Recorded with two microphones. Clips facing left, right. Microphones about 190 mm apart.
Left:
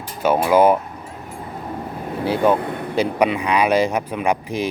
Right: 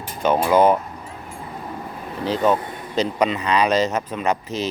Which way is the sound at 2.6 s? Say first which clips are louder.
Left 7 dB; 60° left (ahead or behind).